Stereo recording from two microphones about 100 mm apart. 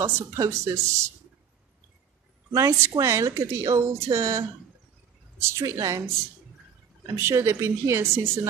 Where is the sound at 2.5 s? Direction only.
30° right (ahead or behind).